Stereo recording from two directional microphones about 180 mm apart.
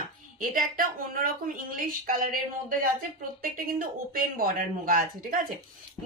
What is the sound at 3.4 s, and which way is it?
A woman's voice, 55° right (ahead or behind).